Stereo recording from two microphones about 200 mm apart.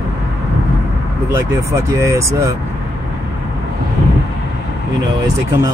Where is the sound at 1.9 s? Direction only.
15° right (ahead or behind).